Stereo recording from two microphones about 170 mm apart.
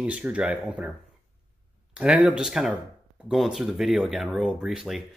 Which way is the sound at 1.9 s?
5° right (ahead or behind).